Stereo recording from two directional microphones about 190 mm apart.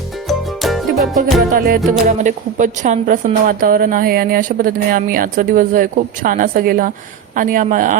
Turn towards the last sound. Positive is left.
turn(degrees=-45)  # may be behind; listen again after turning